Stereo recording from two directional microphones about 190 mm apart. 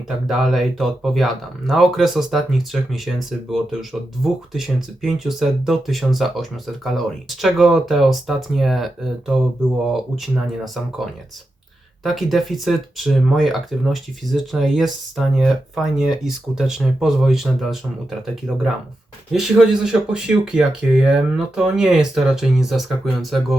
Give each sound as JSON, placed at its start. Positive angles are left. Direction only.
{"t": 0.3, "sound": "speech", "side_deg": 0}
{"t": 19.3, "sound": "speech", "side_deg": 0}